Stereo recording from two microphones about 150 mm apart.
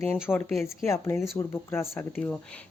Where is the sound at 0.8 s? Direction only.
15° left (ahead or behind).